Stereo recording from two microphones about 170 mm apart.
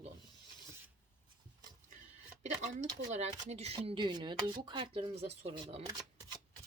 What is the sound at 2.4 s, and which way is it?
Speech, 45° right (ahead or behind).